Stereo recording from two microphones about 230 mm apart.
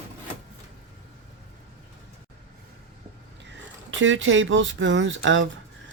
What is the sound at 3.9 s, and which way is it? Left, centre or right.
Speech, right.